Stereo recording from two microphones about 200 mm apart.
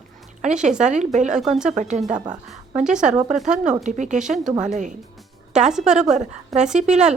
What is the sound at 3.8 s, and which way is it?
Speech, 35° right (ahead or behind).